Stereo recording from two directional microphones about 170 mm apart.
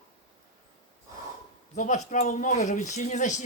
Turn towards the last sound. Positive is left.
turn(degrees=45)  # may be behind; listen again after turning